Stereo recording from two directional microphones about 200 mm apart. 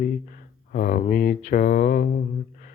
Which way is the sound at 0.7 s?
40° left (ahead or behind).